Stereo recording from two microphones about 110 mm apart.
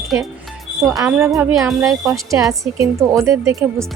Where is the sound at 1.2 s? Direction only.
25° right (ahead or behind).